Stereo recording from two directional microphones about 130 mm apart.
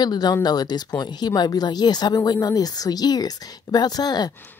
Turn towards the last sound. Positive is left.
turn(degrees=30)  # may be behind; listen again after turning